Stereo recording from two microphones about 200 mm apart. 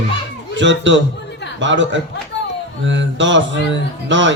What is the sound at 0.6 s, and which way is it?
Speech, 65° right (ahead or behind).